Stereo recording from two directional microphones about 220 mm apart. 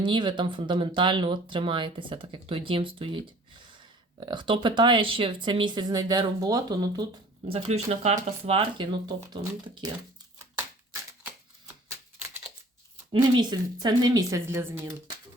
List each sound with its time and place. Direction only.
0.0 s speech: 20° right (ahead or behind)
13.3 s a woman's voice: 20° right (ahead or behind)